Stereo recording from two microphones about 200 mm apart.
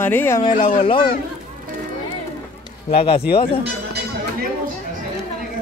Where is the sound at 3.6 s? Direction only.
55° right (ahead or behind).